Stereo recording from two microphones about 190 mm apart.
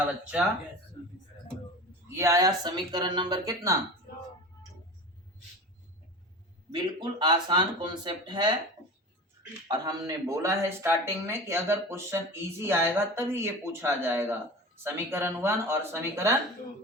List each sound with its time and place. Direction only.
2.0 s speech: 15° right (ahead or behind)
6.7 s speech: 20° right (ahead or behind)
9.6 s speech: 20° right (ahead or behind)